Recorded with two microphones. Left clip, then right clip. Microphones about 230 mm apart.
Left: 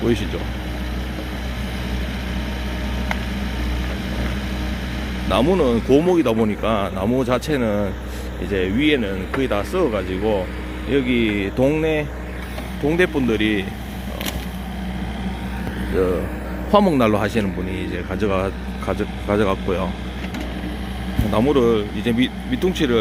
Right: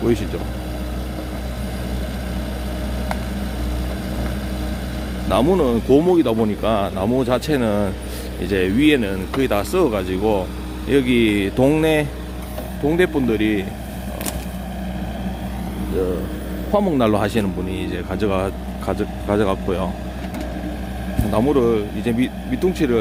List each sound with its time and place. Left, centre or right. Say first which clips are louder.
0.0 s speech: right 1 dB; centre
5.3 s speech: even; centre
12.9 s speech: even; centre
17.0 s speech: even; centre
21.2 s speech: even; centre